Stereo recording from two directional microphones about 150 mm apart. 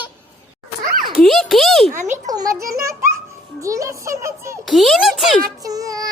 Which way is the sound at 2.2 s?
25° right (ahead or behind).